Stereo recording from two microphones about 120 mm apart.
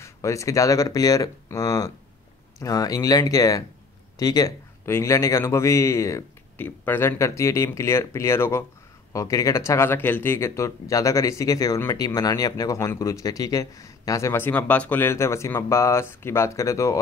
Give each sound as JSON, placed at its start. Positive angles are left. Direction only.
{"t": 0.0, "sound": "a man's voice", "side_deg": 25}